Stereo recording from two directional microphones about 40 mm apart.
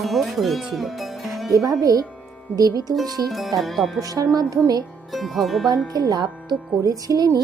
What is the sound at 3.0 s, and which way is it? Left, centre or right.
Speech, centre.